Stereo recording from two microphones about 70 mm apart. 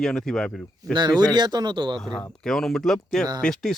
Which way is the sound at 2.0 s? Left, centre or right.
Centre.